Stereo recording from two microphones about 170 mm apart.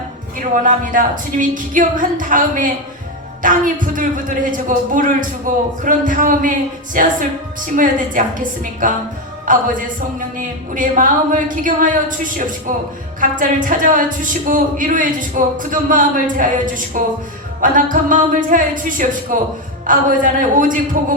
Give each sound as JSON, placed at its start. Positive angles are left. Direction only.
{"t": 0.5, "sound": "speech", "side_deg": -50}
{"t": 10.8, "sound": "speech", "side_deg": -50}